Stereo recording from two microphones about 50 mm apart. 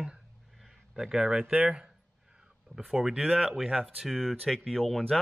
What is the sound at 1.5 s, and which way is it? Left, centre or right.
Speech, right.